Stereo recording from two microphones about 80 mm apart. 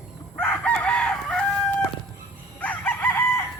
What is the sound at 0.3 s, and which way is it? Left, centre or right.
Chicken, centre.